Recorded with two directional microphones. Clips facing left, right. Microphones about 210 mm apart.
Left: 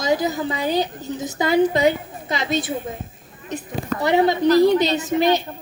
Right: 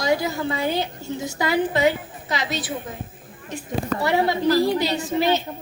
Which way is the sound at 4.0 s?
20° left (ahead or behind).